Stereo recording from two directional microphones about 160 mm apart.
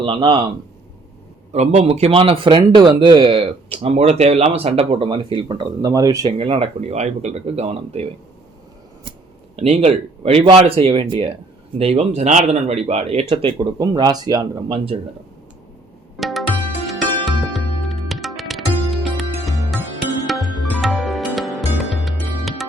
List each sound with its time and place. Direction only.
0.0 s speech: 35° right (ahead or behind)
1.5 s speech: 40° right (ahead or behind); by 6.3 s 20° right (ahead or behind)
6.3 s speech: 35° right (ahead or behind)
9.6 s speech: 45° right (ahead or behind); by 14.8 s 25° right (ahead or behind)
16.1 s music: centre (ahead or behind)